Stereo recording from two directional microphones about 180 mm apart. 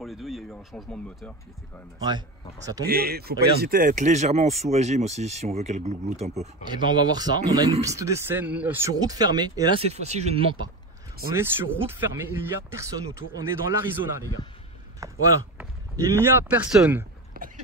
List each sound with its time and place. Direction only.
0.0 s speech: centre (ahead or behind)
2.0 s speech: 20° right (ahead or behind)
2.9 s speech: 60° right (ahead or behind); by 6.5 s 35° right (ahead or behind)
6.6 s speech: 25° right (ahead or behind)
9.8 s speech: 35° right (ahead or behind)
11.3 s speech: 10° right (ahead or behind)
15.0 s speech: 15° right (ahead or behind)
17.3 s a sound: 50° right (ahead or behind)